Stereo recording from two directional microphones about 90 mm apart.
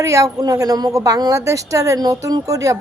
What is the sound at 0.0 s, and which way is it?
A woman's voice, 35° right (ahead or behind).